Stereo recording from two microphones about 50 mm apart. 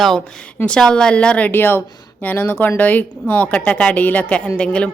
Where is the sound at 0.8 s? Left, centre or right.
Centre.